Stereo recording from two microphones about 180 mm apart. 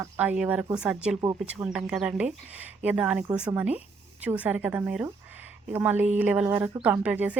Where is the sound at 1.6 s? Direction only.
5° right (ahead or behind).